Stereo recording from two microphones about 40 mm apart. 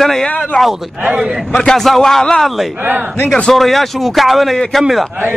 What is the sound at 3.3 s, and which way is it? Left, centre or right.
Speech, left.